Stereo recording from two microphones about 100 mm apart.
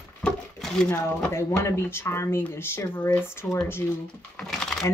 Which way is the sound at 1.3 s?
30° left (ahead or behind).